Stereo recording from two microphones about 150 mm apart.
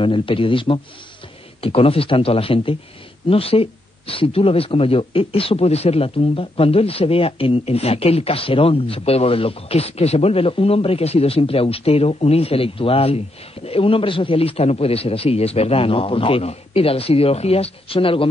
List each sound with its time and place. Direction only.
0.0 s a man's voice: 35° left (ahead or behind)